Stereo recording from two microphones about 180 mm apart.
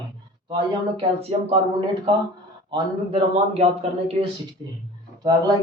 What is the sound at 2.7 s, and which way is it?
A man's voice, 30° right (ahead or behind).